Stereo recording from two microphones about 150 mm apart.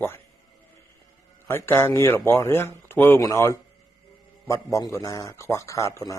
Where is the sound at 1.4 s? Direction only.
15° left (ahead or behind).